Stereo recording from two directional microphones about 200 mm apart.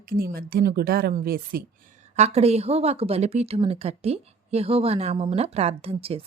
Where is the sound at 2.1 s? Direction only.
35° right (ahead or behind).